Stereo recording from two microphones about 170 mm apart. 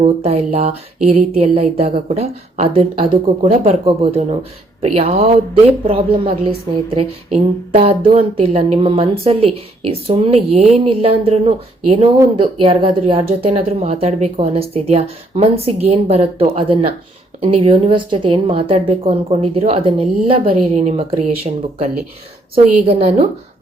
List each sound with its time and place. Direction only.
0.0 s a woman's voice: 40° right (ahead or behind)